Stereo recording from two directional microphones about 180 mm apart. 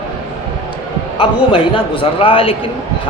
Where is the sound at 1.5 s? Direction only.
30° left (ahead or behind).